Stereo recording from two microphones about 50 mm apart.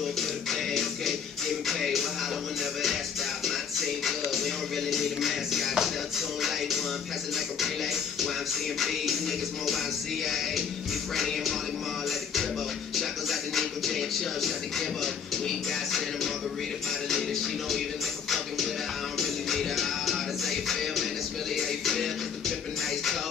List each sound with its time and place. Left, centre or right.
0.5 s music: centre
3.4 s music: centre
10.2 s music: centre
12.9 s a sound: centre
15.4 s music: centre
19.1 s music: centre